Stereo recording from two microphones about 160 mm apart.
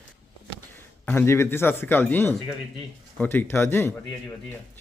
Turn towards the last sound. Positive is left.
turn(degrees=15)  # may be behind; listen again after turning